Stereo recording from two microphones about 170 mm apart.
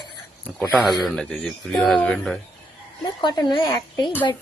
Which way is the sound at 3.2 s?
30° left (ahead or behind).